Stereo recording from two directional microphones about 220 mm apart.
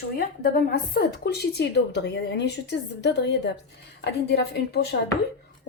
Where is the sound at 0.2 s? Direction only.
40° left (ahead or behind).